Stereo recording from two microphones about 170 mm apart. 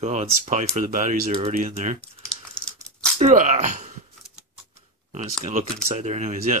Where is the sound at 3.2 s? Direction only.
45° right (ahead or behind).